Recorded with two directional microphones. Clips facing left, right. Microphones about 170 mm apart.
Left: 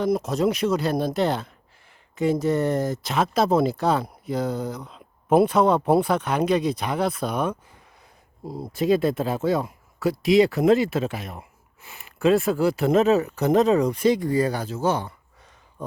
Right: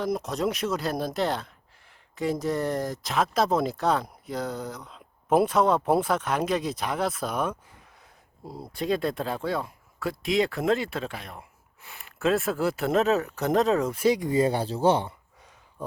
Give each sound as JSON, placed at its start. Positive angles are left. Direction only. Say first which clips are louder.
{"t": 0.0, "sound": "speech", "louder": "left 5 dB", "side_deg": 0}
{"t": 8.4, "sound": "speech", "louder": "left 6 dB", "side_deg": 20}
{"t": 8.7, "sound": "speech", "louder": "left 6 dB", "side_deg": 5}
{"t": 14.3, "sound": "speech", "louder": "left 1 dB", "side_deg": -25}